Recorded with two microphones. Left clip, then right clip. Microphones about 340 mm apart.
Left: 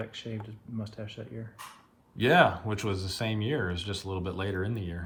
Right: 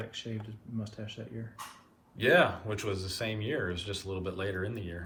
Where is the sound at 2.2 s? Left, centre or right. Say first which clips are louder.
Left 2 dB; centre.